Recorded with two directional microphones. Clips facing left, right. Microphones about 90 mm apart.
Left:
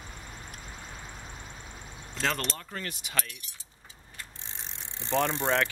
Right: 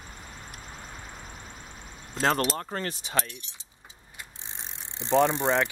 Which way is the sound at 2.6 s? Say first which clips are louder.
Right 6 dB; 40° right (ahead or behind).